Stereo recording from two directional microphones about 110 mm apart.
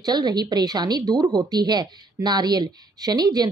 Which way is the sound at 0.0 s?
40° right (ahead or behind).